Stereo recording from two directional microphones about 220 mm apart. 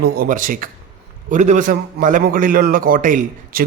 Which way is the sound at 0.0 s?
45° right (ahead or behind).